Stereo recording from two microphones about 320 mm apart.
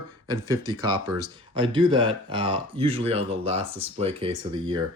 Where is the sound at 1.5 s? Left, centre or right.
Centre.